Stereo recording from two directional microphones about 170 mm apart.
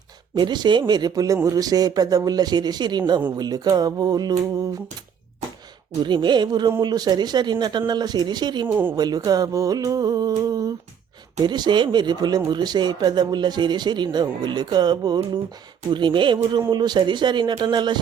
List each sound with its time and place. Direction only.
0.3 s speech: 25° right (ahead or behind)
6.0 s speech: 25° right (ahead or behind)